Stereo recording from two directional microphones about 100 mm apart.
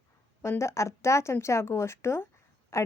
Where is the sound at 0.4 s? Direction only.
25° left (ahead or behind).